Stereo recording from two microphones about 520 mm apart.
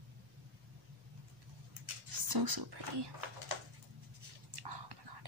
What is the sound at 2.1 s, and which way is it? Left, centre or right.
Speech, right.